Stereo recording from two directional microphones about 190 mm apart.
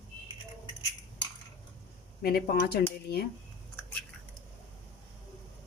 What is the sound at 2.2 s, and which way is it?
Speech, 50° left (ahead or behind).